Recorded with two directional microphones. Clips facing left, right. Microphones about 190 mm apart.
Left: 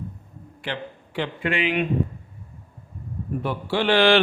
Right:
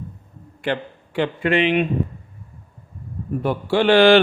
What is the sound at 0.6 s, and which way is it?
A man's voice, 50° right (ahead or behind).